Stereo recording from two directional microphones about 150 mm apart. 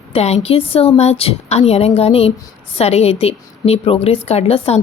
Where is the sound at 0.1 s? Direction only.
45° left (ahead or behind).